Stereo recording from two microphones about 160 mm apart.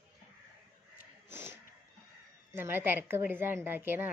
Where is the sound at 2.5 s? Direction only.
15° right (ahead or behind).